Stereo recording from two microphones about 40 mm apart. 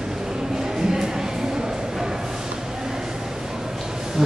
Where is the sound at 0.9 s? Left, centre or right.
Centre.